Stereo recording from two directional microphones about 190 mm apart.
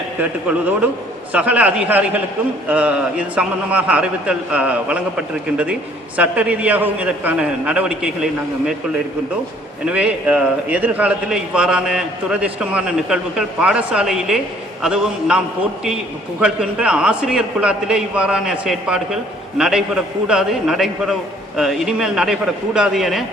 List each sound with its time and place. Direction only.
1.3 s a man's voice: 5° right (ahead or behind)
9.8 s a man's voice: 5° right (ahead or behind)
16.4 s a man's voice: 5° right (ahead or behind)